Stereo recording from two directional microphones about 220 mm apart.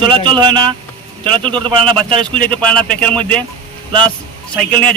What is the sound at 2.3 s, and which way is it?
A man's voice, 5° left (ahead or behind).